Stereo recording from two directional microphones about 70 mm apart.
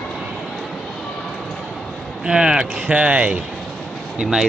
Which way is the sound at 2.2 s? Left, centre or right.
Centre.